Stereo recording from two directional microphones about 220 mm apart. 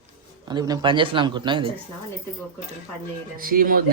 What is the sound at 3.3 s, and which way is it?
Speech, 40° right (ahead or behind).